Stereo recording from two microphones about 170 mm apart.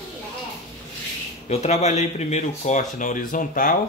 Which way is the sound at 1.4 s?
40° left (ahead or behind).